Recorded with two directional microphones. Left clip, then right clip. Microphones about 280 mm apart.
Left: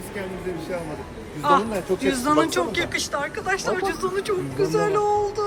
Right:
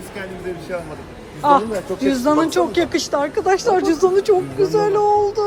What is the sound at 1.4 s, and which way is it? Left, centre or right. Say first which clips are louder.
Speech: right 5 dB; centre.